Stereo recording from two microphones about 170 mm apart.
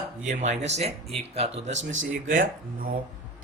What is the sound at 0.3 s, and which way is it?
A man's voice, 45° right (ahead or behind).